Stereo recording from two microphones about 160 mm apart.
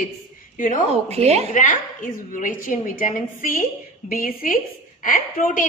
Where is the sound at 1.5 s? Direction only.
50° left (ahead or behind).